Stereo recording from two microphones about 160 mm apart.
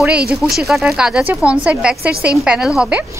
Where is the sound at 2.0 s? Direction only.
75° right (ahead or behind).